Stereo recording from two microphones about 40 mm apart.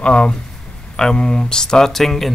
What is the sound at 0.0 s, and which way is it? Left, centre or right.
Speech, left.